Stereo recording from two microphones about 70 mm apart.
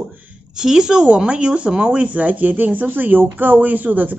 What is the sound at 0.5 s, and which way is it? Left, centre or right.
Speech, centre.